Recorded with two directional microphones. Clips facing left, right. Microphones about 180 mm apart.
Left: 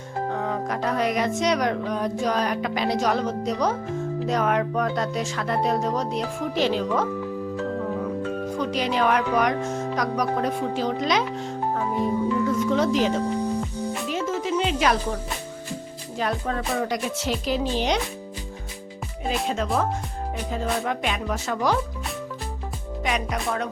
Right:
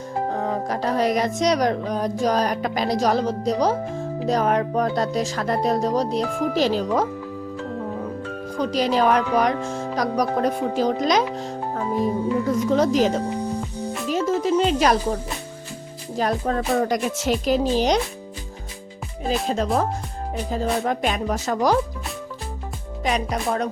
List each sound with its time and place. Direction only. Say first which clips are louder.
0.3 s speech: right 1 dB; 35° right (ahead or behind)
8.5 s speech: right 5 dB; 35° right (ahead or behind)
12.5 s speech: right 5 dB; 40° right (ahead or behind)
19.3 s speech: right 3 dB; 35° right (ahead or behind)
23.0 s speech: right 3 dB; 35° right (ahead or behind)